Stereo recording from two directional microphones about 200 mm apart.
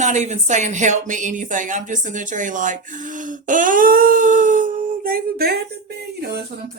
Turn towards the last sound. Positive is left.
turn(degrees=-55)  # may be behind; listen again after turning